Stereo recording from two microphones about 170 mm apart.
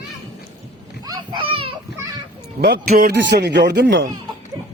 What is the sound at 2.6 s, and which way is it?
Speech, 60° right (ahead or behind).